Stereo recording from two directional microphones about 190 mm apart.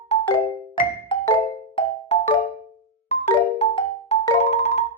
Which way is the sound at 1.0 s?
30° left (ahead or behind).